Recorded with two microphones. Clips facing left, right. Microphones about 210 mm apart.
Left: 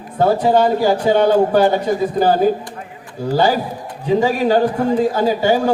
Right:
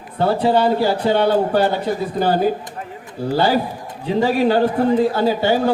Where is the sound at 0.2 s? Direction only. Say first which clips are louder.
Left 2 dB; 45° left (ahead or behind).